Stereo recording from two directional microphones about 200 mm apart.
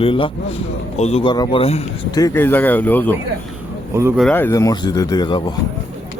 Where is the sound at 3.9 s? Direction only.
15° right (ahead or behind).